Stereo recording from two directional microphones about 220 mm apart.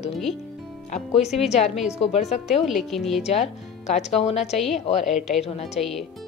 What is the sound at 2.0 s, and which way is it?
Speech, 30° left (ahead or behind).